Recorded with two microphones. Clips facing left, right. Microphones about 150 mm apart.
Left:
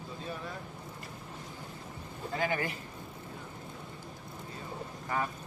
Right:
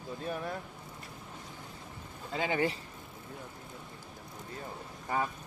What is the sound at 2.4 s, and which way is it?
Speech, 20° right (ahead or behind).